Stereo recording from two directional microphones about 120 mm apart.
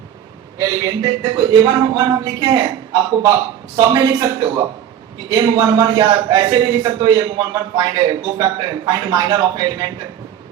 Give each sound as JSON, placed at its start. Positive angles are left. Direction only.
{"t": 0.6, "sound": "a man's voice", "side_deg": -30}